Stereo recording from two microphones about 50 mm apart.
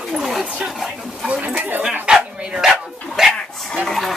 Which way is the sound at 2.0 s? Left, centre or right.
Centre.